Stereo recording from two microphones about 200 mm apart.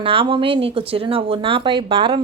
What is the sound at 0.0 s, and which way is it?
A woman's voice, 25° right (ahead or behind).